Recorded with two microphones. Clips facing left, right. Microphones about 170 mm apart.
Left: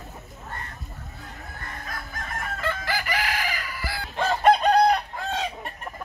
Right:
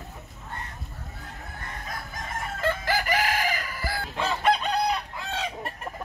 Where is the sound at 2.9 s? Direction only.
45° right (ahead or behind).